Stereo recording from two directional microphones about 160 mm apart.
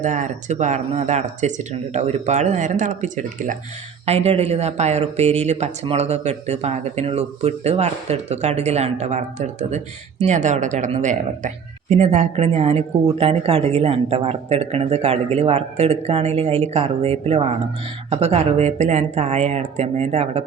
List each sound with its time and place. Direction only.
0.0 s speech: 50° right (ahead or behind)
4.0 s speech: 40° right (ahead or behind)